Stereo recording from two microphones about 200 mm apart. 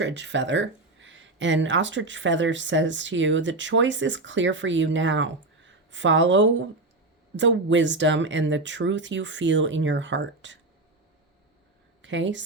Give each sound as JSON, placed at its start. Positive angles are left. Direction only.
{"t": 0.0, "sound": "speech", "side_deg": -60}
{"t": 12.0, "sound": "speech", "side_deg": -65}